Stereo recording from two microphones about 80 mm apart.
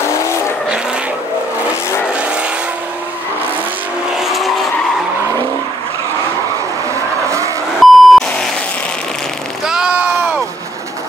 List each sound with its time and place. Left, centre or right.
2.1 s vehicle: centre
4.2 s vehicle: centre
7.2 s vehicle: right
7.8 s beep: centre
9.7 s a sound: centre